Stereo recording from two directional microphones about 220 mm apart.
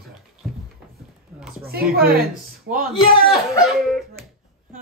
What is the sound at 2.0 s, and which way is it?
Speech, 45° right (ahead or behind).